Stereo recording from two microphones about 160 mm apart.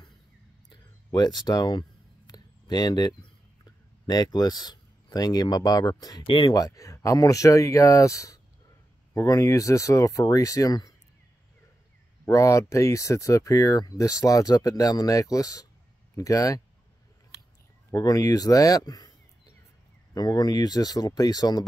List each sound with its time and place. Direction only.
0.7 s speech: 25° left (ahead or behind)
12.3 s speech: 20° left (ahead or behind)
17.9 s speech: 25° left (ahead or behind)
20.2 s speech: 25° left (ahead or behind)